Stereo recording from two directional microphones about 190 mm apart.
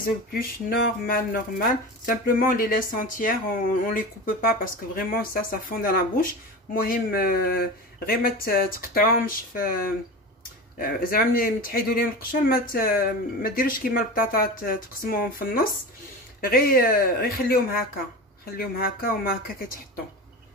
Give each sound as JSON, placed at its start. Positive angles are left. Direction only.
{"t": 0.0, "sound": "speech", "side_deg": 50}
{"t": 10.8, "sound": "speech", "side_deg": 50}